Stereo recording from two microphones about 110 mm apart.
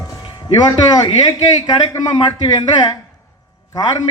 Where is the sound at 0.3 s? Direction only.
45° left (ahead or behind).